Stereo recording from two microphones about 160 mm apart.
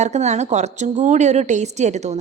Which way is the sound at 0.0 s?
45° right (ahead or behind).